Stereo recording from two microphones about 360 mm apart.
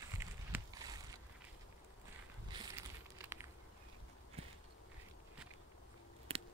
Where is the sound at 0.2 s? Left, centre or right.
Centre.